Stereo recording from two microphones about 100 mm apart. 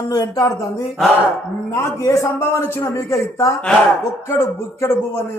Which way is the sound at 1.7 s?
30° left (ahead or behind).